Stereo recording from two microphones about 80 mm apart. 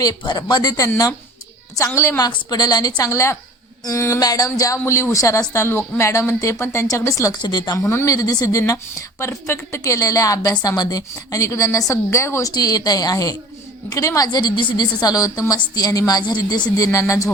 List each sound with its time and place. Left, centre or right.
0.2 s speech: left
2.0 s speech: left
2.2 s speech: left
3.0 s speech: left
4.2 s speech: left
4.9 s speech: left
7.4 s speech: left
7.8 s speech: left
12.5 s speech: left
14.3 s a woman's voice: left
15.0 s speech: left